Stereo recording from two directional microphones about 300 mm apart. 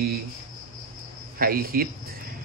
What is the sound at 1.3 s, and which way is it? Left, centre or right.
Speech, right.